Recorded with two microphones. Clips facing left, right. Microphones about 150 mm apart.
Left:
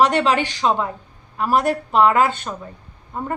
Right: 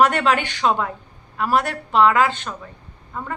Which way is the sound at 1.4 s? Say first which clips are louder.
Left 2 dB; 35° left (ahead or behind).